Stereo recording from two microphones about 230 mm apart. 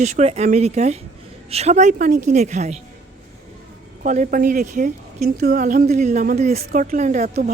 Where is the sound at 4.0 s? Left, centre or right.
Right.